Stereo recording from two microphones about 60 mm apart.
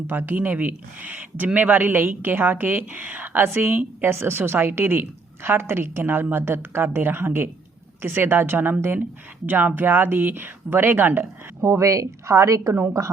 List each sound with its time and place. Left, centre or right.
0.1 s a woman's voice: right
11.6 s speech: right